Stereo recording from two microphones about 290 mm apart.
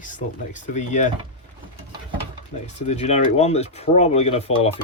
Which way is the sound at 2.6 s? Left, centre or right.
Left.